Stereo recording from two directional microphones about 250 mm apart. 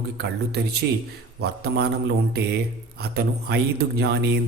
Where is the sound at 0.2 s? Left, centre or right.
Right.